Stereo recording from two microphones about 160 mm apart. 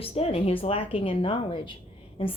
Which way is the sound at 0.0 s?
35° left (ahead or behind).